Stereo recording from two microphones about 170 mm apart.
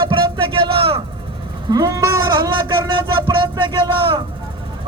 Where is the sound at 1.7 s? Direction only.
20° right (ahead or behind).